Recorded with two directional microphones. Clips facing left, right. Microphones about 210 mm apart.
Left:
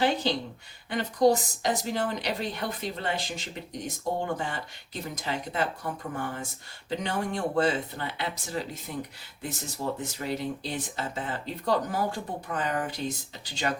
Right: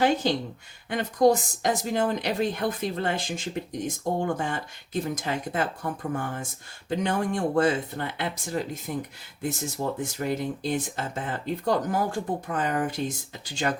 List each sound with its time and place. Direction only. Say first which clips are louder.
0.0 s a woman's voice: right 3 dB; 50° right (ahead or behind)
9.8 s speech: right 2 dB; 35° right (ahead or behind)
10.2 s a woman's voice: right 3 dB; 50° right (ahead or behind)